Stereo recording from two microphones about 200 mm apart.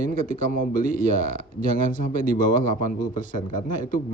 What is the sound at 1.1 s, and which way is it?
A man's voice, 45° left (ahead or behind).